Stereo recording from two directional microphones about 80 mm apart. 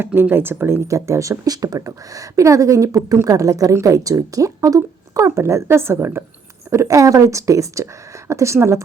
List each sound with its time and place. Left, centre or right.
0.0 s speech: right
0.9 s a woman's voice: right
6.7 s a woman's voice: right